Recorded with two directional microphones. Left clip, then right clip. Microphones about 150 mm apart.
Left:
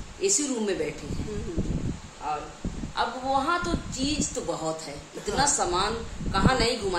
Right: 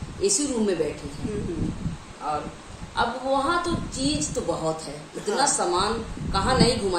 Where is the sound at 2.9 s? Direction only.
15° left (ahead or behind).